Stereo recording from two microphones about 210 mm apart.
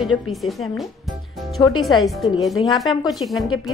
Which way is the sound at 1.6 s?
20° left (ahead or behind).